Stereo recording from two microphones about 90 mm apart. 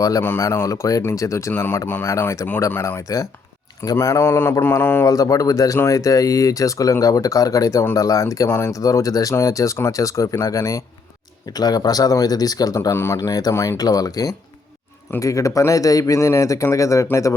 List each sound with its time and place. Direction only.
0.2 s speech: 25° left (ahead or behind)
3.9 s mantra: 30° left (ahead or behind)
5.0 s speech: 40° left (ahead or behind)